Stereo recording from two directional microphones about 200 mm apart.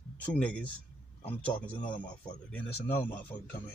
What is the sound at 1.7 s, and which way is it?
Speech, 25° left (ahead or behind).